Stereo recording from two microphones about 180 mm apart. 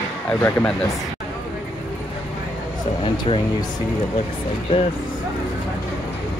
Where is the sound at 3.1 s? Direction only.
30° left (ahead or behind).